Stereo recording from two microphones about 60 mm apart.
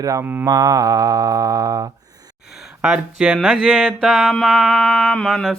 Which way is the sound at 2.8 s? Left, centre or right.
Centre.